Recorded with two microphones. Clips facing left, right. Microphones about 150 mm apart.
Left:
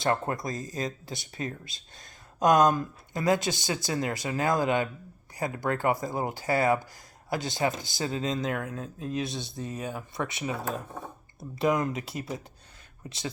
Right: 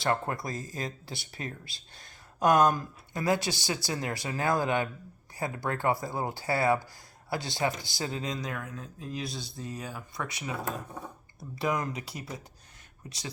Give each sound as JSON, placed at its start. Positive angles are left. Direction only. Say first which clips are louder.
{"t": 0.0, "sound": "speech", "louder": "left 2 dB", "side_deg": 25}